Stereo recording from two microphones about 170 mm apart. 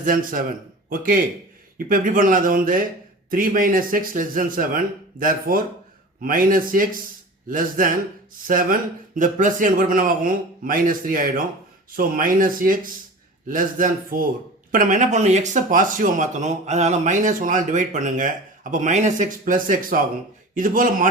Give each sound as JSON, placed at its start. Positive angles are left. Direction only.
{"t": 0.0, "sound": "a man's voice", "side_deg": -55}